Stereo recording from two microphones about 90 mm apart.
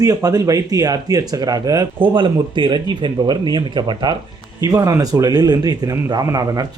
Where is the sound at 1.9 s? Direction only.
65° right (ahead or behind).